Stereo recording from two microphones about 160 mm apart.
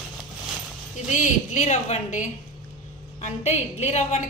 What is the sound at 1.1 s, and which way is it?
A woman's voice, 50° left (ahead or behind).